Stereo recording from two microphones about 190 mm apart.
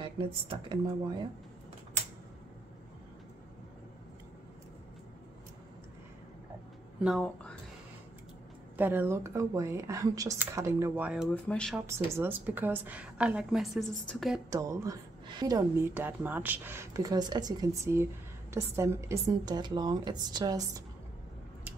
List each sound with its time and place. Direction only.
0.0 s speech: 30° right (ahead or behind)
7.0 s speech: 5° right (ahead or behind)
8.7 s a woman's voice: 10° right (ahead or behind)
11.4 s speech: 5° left (ahead or behind)
11.7 s a woman's voice: 10° right (ahead or behind)
14.5 s a woman's voice: 15° right (ahead or behind)